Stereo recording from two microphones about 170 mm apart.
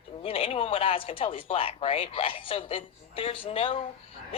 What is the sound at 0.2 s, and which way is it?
Speech, 35° left (ahead or behind).